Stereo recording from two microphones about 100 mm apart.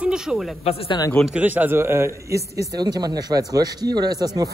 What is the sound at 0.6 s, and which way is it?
Speech, 80° left.